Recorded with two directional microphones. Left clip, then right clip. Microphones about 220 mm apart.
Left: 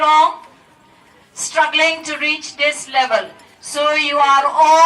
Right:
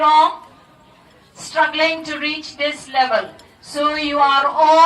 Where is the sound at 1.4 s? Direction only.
40° left (ahead or behind).